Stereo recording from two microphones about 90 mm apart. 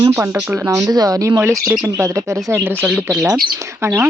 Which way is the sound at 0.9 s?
45° right (ahead or behind).